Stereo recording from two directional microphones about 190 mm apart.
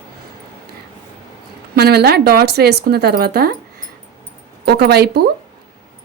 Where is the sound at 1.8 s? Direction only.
55° right (ahead or behind).